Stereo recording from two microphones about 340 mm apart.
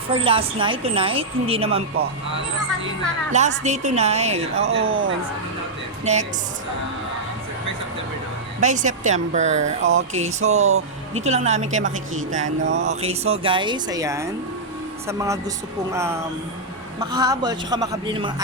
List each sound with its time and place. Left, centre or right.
0.1 s speech: centre
3.3 s a woman's voice: centre
4.9 s speech: right
6.1 s a woman's voice: centre
8.6 s a woman's voice: right
10.7 s speech: right
11.2 s a woman's voice: centre